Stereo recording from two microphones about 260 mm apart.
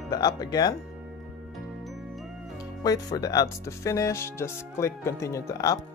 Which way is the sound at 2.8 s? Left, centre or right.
Centre.